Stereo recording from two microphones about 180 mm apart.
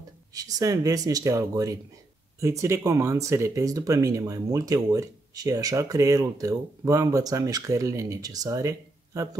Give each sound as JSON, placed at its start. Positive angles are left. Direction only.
{"t": 0.3, "sound": "speech", "side_deg": -20}